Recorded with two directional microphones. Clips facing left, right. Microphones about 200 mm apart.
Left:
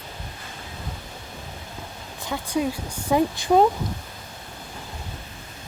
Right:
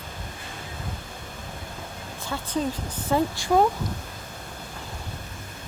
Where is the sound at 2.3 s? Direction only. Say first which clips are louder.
Left 3 dB; 10° left (ahead or behind).